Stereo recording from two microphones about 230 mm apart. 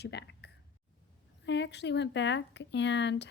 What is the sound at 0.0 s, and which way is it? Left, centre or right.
Speech, left.